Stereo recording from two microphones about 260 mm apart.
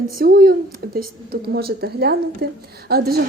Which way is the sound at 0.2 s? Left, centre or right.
Right.